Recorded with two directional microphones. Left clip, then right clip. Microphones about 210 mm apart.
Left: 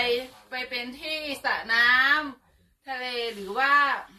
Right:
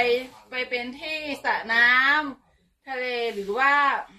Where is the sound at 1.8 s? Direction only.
10° left (ahead or behind).